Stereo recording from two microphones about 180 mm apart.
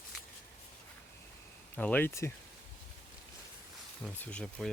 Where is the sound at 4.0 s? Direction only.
5° left (ahead or behind).